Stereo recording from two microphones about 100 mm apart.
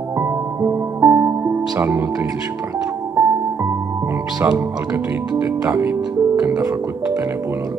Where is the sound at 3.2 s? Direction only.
30° right (ahead or behind).